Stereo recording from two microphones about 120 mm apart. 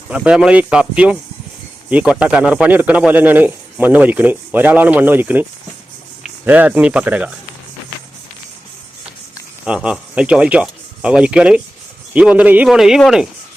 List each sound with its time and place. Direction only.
0.1 s a man's voice: 10° right (ahead or behind)
9.6 s a man's voice: 10° right (ahead or behind)